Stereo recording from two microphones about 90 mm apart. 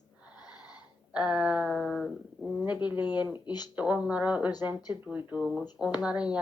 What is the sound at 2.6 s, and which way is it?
A woman's voice, 15° right (ahead or behind).